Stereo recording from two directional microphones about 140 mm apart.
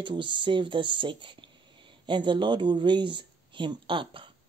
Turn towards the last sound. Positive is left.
turn(degrees=-35)  # may be behind; listen again after turning